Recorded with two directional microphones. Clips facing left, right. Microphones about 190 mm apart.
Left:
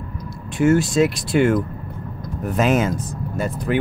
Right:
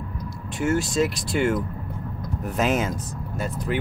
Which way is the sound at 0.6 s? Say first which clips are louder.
Left 6 dB; 55° left (ahead or behind).